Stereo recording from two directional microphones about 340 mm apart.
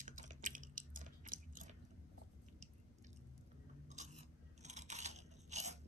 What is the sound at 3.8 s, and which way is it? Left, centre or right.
Biting, right.